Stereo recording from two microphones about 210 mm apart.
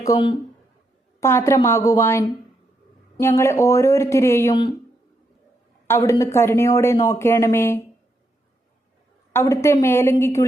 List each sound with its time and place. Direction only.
0.0 s speech: 20° left (ahead or behind)
5.9 s speech: 15° left (ahead or behind)
9.3 s speech: 15° left (ahead or behind)